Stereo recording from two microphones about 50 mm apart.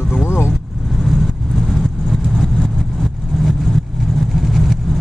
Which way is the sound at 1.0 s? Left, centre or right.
Centre.